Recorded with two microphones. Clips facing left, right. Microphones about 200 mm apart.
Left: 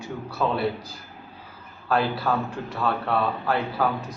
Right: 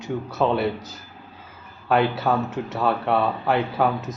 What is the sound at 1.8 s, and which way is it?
Speech, 25° right (ahead or behind).